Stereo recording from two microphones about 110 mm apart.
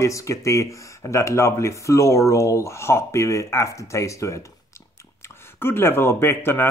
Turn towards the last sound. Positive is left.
turn(degrees=20)  # may be behind; listen again after turning